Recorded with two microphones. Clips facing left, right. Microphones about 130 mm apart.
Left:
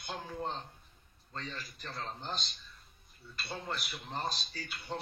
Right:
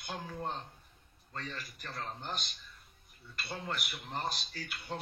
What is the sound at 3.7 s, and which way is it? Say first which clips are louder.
Speech: even; 15° right (ahead or behind).